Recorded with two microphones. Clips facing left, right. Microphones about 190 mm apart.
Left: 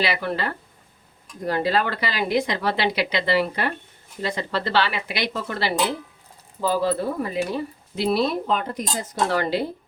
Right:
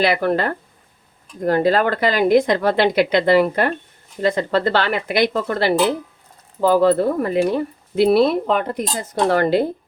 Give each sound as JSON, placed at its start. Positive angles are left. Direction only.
{"t": 0.0, "sound": "speech", "side_deg": -50}